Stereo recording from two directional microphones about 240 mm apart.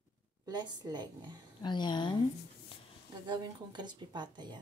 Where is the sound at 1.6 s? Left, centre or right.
Centre.